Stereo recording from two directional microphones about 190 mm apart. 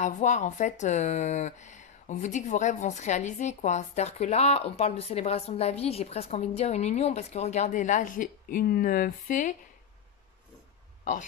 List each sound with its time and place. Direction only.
0.0 s speech: 40° left (ahead or behind)